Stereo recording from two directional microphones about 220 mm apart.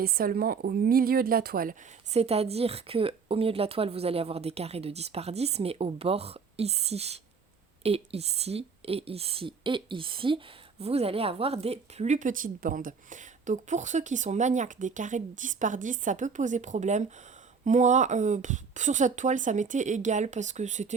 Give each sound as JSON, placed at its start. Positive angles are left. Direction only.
{"t": 0.0, "sound": "a woman's voice", "side_deg": -45}
{"t": 2.1, "sound": "a woman's voice", "side_deg": -30}